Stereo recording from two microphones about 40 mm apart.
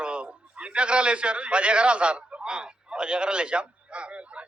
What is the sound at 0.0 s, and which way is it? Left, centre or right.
A man's voice, right.